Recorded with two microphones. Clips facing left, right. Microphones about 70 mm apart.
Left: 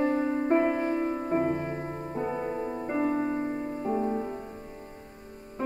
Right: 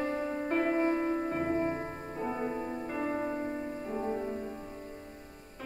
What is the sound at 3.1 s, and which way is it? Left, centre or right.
Music, centre.